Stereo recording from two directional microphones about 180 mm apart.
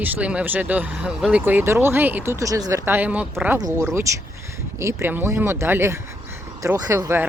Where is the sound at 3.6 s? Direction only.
20° right (ahead or behind).